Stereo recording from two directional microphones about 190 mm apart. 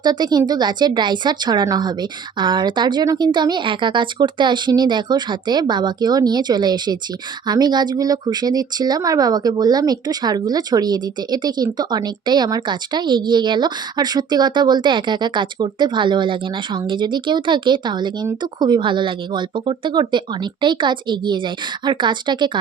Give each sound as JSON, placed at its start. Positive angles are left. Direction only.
{"t": 0.0, "sound": "speech", "side_deg": -20}